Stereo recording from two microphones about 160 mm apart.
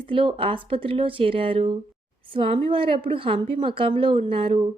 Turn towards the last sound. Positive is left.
turn(degrees=-35)  # may be behind; listen again after turning